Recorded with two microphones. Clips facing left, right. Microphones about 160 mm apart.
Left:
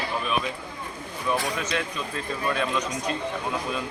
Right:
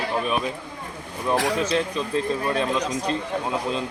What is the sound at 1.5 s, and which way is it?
A man's voice, 30° right (ahead or behind).